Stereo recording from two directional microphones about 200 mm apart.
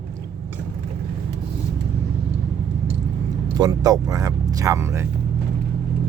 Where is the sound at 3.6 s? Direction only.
20° right (ahead or behind).